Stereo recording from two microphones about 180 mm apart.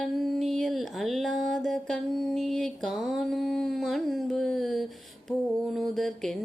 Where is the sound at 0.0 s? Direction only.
Centre (ahead or behind).